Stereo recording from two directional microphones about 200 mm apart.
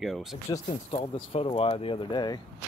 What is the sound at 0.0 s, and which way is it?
Speech, centre (ahead or behind).